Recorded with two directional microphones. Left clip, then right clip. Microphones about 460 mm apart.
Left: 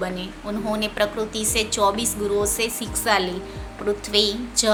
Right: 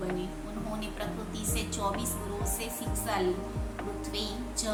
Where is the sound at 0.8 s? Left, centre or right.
Centre.